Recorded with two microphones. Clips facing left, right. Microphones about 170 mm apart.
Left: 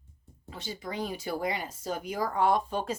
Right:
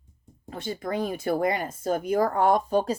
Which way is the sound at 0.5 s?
55° right (ahead or behind).